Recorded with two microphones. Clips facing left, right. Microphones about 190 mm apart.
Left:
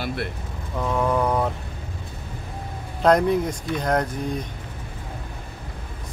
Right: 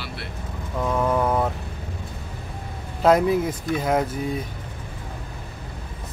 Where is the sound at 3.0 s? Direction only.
5° right (ahead or behind).